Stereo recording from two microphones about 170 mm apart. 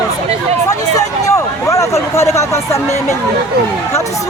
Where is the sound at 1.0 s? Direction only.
20° left (ahead or behind).